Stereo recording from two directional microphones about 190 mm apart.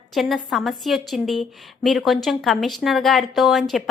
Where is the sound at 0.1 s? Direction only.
Centre (ahead or behind).